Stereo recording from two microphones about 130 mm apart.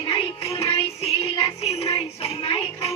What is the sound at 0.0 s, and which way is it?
Music, 40° left (ahead or behind).